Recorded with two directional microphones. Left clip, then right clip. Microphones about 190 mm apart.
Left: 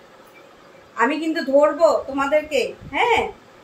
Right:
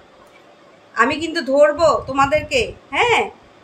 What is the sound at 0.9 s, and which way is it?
A woman's voice, 55° right (ahead or behind).